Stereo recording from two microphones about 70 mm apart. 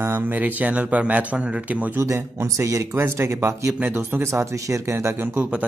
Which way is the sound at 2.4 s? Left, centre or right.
Right.